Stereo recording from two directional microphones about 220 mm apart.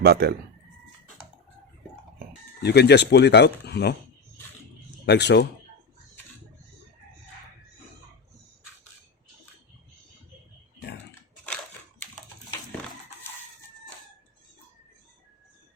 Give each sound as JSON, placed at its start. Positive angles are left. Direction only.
{"t": 0.0, "sound": "speech", "side_deg": -45}
{"t": 2.6, "sound": "speech", "side_deg": 50}
{"t": 5.0, "sound": "speech", "side_deg": 50}
{"t": 11.4, "sound": "crushing", "side_deg": 5}